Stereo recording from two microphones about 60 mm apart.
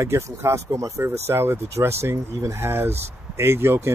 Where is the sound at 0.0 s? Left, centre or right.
Right.